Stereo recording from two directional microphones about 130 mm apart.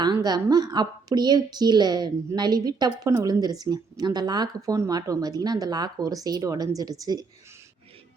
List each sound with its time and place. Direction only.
0.0 s a woman's voice: 30° right (ahead or behind)